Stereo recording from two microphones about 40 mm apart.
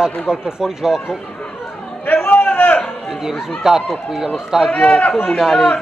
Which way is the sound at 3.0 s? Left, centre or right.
Centre.